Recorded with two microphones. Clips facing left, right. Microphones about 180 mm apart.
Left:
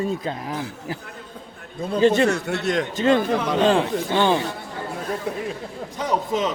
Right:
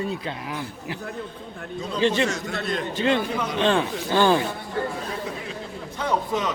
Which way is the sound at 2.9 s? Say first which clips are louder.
Left 3 dB; 40° left (ahead or behind).